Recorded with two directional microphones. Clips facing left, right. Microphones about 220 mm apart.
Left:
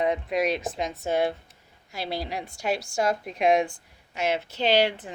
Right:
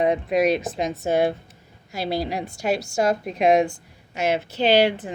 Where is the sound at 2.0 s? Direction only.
40° right (ahead or behind).